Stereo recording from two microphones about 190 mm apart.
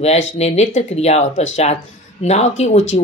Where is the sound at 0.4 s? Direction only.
35° left (ahead or behind).